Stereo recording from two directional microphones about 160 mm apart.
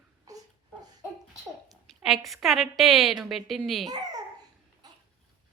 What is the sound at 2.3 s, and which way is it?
Speech, centre (ahead or behind).